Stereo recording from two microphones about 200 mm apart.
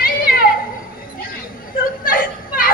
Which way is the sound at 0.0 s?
45° left (ahead or behind).